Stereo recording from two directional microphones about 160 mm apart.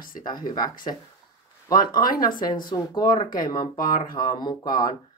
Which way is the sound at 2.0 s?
60° left (ahead or behind).